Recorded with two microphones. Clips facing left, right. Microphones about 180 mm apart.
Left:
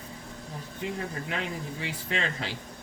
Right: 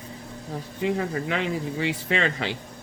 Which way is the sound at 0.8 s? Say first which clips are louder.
Right 8 dB; 90° right.